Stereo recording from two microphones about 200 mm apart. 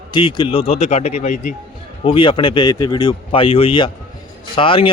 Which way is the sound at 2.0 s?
25° left (ahead or behind).